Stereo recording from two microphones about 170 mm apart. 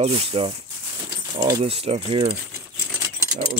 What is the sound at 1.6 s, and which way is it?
Speech, 35° right (ahead or behind).